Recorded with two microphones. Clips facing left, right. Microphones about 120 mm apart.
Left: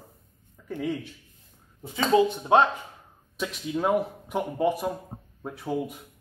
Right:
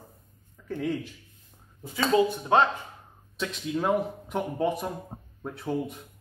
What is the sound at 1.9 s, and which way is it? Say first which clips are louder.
A man's voice: left 2 dB; 20° left (ahead or behind).